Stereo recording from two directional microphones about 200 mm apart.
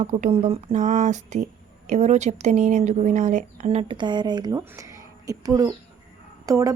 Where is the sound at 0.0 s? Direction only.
35° right (ahead or behind).